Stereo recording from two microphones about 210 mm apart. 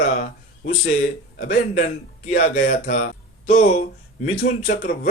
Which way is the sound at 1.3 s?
45° left (ahead or behind).